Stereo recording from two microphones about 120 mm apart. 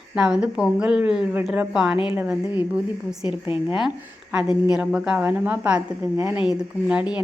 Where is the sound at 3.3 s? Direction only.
45° left (ahead or behind).